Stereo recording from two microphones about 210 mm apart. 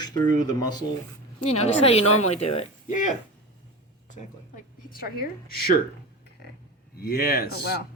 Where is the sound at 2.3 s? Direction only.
30° left (ahead or behind).